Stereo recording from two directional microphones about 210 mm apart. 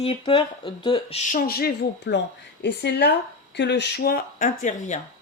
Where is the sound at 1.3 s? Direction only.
45° left (ahead or behind).